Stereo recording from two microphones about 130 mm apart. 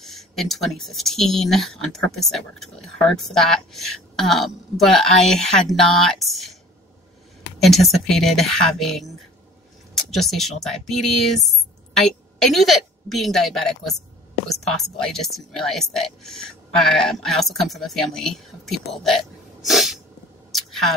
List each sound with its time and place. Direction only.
0.0 s speech: centre (ahead or behind)
7.5 s speech: centre (ahead or behind)
12.4 s speech: centre (ahead or behind)
20.5 s a sound: centre (ahead or behind)